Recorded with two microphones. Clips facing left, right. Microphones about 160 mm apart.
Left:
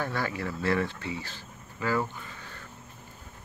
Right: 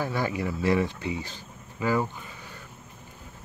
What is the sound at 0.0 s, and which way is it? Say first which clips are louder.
Speech: right 3 dB; 15° right (ahead or behind).